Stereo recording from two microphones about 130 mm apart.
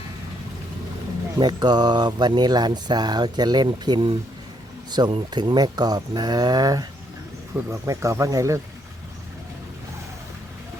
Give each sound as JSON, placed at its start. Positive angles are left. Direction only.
{"t": 1.4, "sound": "speech", "side_deg": -35}